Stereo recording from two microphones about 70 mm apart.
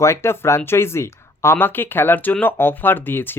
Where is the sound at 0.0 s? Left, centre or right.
Left.